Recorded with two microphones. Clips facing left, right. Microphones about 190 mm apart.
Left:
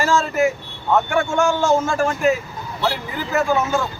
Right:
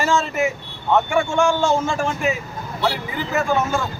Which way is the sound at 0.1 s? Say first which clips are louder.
Left 2 dB; centre (ahead or behind).